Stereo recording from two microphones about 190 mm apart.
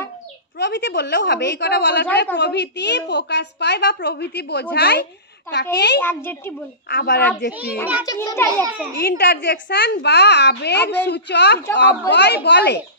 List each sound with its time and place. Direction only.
0.6 s a woman's voice: 65° left (ahead or behind)
5.9 s a child's voice: 10° left (ahead or behind)
6.9 s a woman's voice: 55° left (ahead or behind)
8.0 s a child's voice: 20° left (ahead or behind)
9.0 s a woman's voice: 55° left (ahead or behind)